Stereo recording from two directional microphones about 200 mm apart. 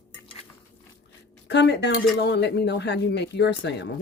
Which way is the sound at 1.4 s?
60° left (ahead or behind).